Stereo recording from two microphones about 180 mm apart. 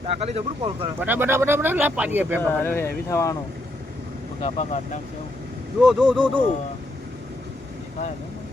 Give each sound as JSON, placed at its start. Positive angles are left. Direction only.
{"t": 0.0, "sound": "speech", "side_deg": -35}
{"t": 0.9, "sound": "speech", "side_deg": -10}
{"t": 2.4, "sound": "speech", "side_deg": 10}
{"t": 4.4, "sound": "speech", "side_deg": 40}
{"t": 5.8, "sound": "speech", "side_deg": 0}